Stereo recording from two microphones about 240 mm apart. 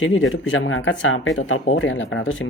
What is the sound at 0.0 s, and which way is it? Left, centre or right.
Speech, left.